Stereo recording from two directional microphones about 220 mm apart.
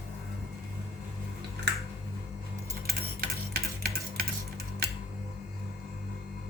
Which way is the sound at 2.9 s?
45° right (ahead or behind).